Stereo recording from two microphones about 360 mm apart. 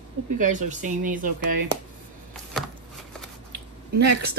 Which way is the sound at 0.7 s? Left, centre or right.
Right.